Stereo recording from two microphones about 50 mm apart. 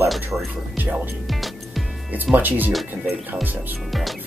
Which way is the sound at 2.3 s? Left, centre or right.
Right.